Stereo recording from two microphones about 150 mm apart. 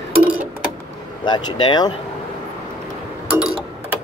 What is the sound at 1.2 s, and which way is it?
Speech, 30° left (ahead or behind).